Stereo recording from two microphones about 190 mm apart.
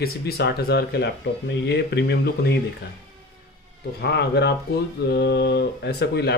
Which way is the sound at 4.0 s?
60° left (ahead or behind).